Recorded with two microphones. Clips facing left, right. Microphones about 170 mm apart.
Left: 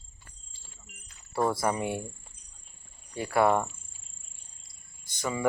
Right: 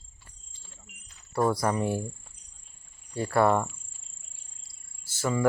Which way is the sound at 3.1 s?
5° left (ahead or behind).